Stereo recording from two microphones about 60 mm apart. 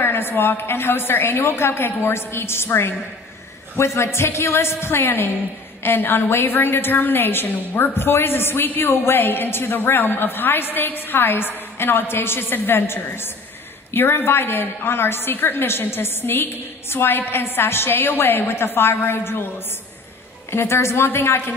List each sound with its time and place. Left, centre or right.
0.0 s a woman's voice: left
20.5 s a woman's voice: left